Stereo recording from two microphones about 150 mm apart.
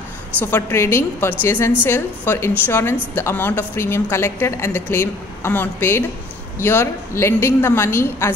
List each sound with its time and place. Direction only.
0.4 s a woman's voice: 15° left (ahead or behind)